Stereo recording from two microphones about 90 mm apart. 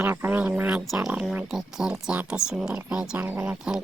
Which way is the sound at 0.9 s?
5° right (ahead or behind).